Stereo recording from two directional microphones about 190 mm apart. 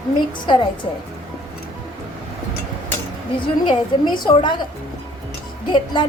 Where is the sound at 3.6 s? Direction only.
25° left (ahead or behind).